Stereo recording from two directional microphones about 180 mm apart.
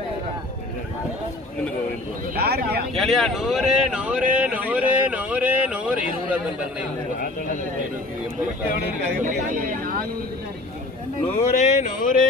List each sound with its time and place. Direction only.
2.3 s speech: 60° right (ahead or behind)
3.0 s speech: centre (ahead or behind)
9.2 s speech: 45° right (ahead or behind)
11.3 s speech: 40° left (ahead or behind)